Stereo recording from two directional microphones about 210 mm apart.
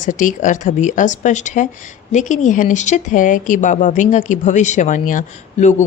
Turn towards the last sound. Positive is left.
turn(degrees=35)  # may be behind; listen again after turning